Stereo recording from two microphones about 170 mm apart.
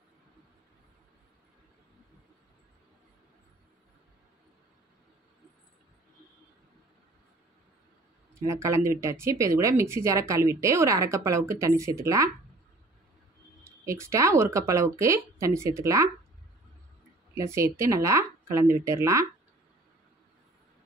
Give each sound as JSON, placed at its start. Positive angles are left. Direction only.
{"t": 8.4, "sound": "speech", "side_deg": -15}
{"t": 13.8, "sound": "speech", "side_deg": -15}
{"t": 17.3, "sound": "speech", "side_deg": -15}